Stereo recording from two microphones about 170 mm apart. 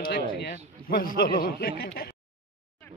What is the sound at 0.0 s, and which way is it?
Speech, 70° left (ahead or behind).